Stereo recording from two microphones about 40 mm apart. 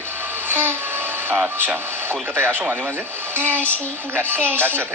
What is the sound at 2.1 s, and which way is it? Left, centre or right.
Speech, right.